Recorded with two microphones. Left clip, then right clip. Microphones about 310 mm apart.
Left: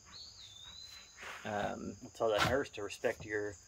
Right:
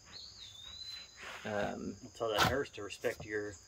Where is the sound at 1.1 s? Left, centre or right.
Centre.